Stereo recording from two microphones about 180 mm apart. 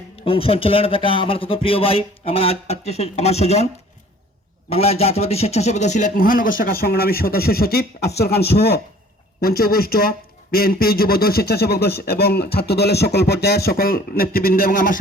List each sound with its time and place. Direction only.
0.3 s speech: 30° left (ahead or behind)
4.7 s a man's voice: 35° left (ahead or behind); by 14.9 s 50° left (ahead or behind)